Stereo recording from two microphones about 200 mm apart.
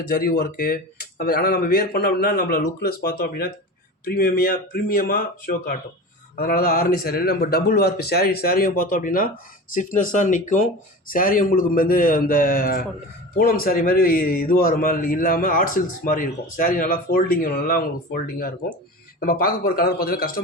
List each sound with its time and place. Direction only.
0.1 s a man's voice: 50° left (ahead or behind)